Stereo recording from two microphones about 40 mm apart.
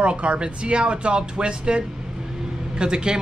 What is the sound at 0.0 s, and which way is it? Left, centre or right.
A man's voice, right.